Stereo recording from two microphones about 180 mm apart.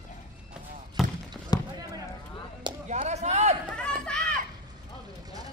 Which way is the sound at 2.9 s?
40° right (ahead or behind).